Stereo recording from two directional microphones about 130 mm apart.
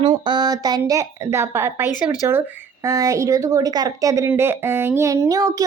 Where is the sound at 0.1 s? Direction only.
35° right (ahead or behind).